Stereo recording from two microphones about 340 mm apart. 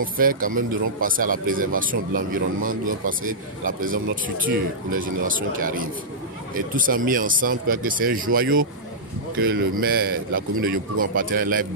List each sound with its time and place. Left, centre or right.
0.0 s speech: right